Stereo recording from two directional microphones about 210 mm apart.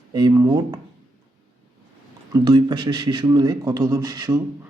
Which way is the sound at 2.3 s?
20° right (ahead or behind).